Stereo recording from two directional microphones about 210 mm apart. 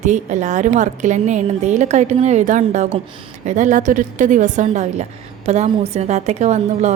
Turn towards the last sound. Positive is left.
turn(degrees=-30)  # may be behind; listen again after turning